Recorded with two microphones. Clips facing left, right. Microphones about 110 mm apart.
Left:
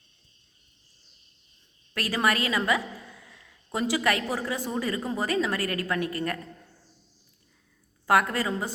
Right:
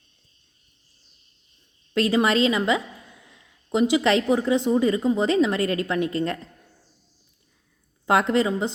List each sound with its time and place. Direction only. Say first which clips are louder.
1.9 s speech: right 6 dB; 25° right (ahead or behind)
8.0 s speech: right 4 dB; 25° right (ahead or behind)